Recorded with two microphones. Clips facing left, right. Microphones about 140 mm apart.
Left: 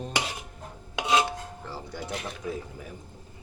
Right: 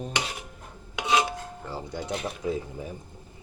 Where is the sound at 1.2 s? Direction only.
15° right (ahead or behind).